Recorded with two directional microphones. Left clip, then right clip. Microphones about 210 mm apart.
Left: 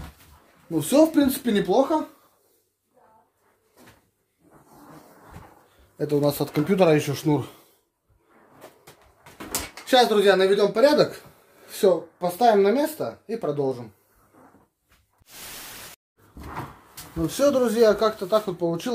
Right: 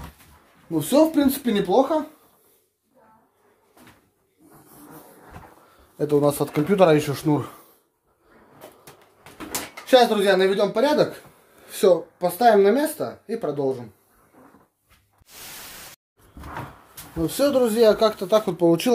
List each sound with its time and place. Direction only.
0.7 s speech: centre (ahead or behind)
5.9 s speech: centre (ahead or behind)
9.8 s speech: centre (ahead or behind)
11.6 s speech: 5° right (ahead or behind)
17.2 s speech: centre (ahead or behind)
17.9 s speech: 10° right (ahead or behind)
18.3 s speech: 30° right (ahead or behind)